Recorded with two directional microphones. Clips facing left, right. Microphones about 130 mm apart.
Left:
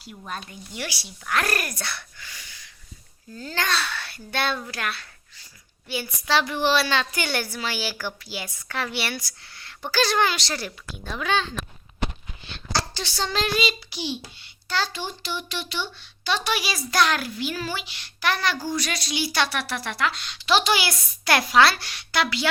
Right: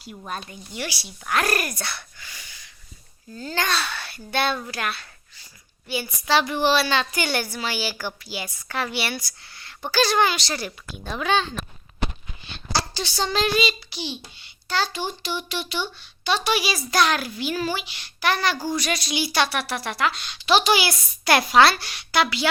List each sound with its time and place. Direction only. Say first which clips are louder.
0.7 s a woman's voice: right 2 dB; centre (ahead or behind)
1.2 s a woman's voice: right 2 dB; 15° right (ahead or behind)
6.7 s a woman's voice: even; 5° right (ahead or behind)
7.3 s a woman's voice: right 2 dB; 15° right (ahead or behind)
10.7 s a woman's voice: right 2 dB; 20° right (ahead or behind)
12.4 s a sound: right 1 dB; 10° right (ahead or behind)
13.9 s a child's voice: left 2 dB; 5° left (ahead or behind)
14.7 s a woman's voice: right 2 dB; 5° right (ahead or behind)
21.5 s a woman's voice: right 2 dB; 25° right (ahead or behind)
21.8 s a woman's voice: right 3 dB; 15° right (ahead or behind)